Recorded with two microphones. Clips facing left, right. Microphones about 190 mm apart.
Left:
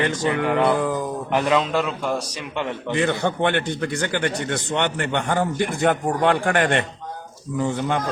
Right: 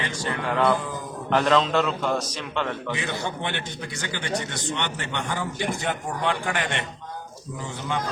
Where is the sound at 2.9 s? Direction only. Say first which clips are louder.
Left 8 dB; 60° left (ahead or behind).